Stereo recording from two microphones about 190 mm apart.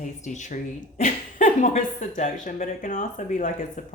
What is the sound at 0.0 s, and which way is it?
Speech, 40° left (ahead or behind).